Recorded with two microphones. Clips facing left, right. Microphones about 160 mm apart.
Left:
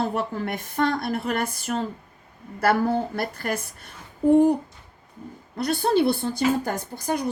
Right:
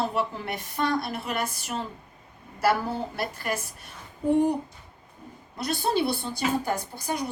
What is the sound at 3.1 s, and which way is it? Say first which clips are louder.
Speech: left 3 dB; 50° left (ahead or behind).